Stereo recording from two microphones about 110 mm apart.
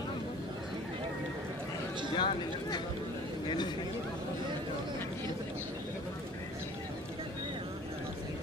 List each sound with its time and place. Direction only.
2.1 s speech: 45° left (ahead or behind)